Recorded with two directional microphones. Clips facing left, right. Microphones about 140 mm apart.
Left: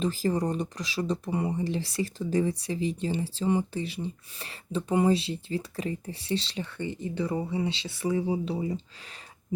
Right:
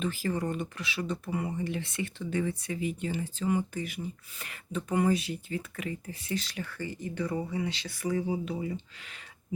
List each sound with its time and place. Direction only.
0.0 s speech: 35° left (ahead or behind)